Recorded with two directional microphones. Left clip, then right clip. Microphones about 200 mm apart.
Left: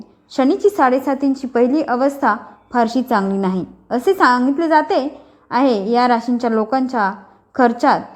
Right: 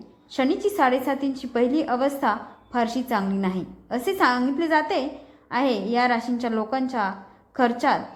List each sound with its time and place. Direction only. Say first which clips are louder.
0.3 s a woman's voice: left 7 dB; 35° left (ahead or behind)